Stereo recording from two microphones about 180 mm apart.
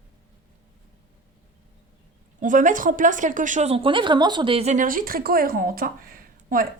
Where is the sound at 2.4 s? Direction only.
45° right (ahead or behind).